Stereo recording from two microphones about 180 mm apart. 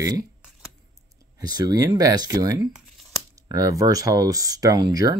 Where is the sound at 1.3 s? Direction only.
20° right (ahead or behind).